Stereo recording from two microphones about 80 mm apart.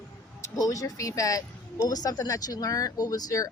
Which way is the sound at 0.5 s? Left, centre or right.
Left.